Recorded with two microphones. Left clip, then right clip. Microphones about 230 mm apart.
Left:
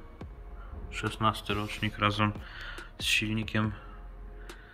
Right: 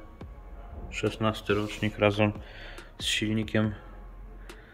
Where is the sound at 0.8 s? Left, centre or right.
Centre.